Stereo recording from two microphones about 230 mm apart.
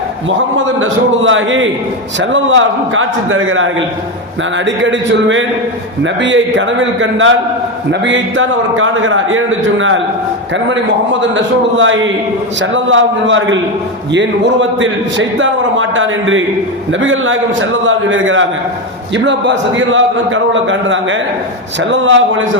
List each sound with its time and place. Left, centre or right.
0.8 s a man's voice: right
11.2 s a man's voice: right